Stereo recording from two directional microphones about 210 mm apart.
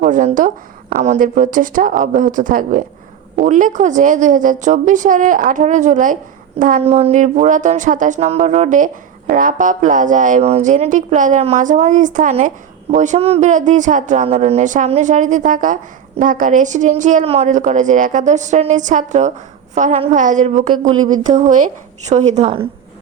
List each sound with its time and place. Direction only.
0.0 s speech: 35° right (ahead or behind)
20.7 s speech: 80° right
21.1 s speech: 35° right (ahead or behind)